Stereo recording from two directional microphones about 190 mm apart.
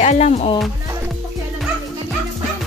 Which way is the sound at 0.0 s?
35° left (ahead or behind).